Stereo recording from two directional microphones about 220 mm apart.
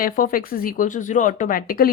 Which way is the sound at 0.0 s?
40° left (ahead or behind).